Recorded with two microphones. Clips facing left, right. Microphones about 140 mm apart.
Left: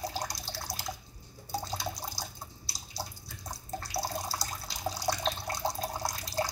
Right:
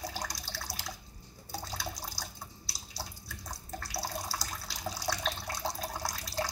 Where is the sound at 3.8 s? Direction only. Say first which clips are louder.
Left 3 dB; 20° left (ahead or behind).